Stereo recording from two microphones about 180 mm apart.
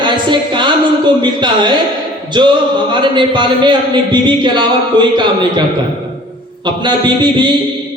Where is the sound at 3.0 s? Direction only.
25° right (ahead or behind).